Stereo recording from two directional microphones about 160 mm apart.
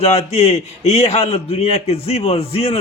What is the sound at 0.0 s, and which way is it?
A man's voice, 40° left (ahead or behind).